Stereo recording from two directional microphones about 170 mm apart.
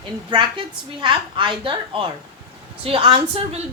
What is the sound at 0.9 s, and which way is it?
A woman's voice, 25° right (ahead or behind).